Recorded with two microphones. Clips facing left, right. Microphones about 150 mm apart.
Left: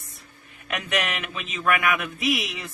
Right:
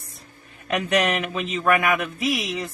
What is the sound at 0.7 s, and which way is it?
A man's voice, 35° right (ahead or behind).